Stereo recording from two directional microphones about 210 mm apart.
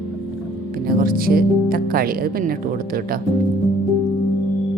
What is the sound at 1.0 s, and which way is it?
Speech, 45° right (ahead or behind).